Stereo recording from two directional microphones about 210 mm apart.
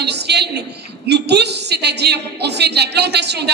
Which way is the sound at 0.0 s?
55° right (ahead or behind).